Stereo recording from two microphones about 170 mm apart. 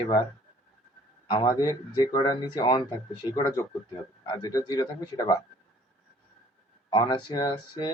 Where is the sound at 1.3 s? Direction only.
25° left (ahead or behind).